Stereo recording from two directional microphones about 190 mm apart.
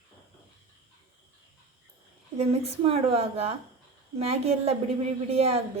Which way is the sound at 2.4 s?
30° right (ahead or behind).